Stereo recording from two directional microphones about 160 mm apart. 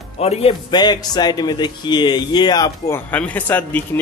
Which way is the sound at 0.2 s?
40° left (ahead or behind).